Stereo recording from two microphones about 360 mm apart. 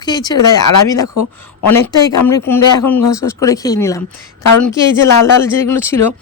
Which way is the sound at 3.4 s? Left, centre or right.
Centre.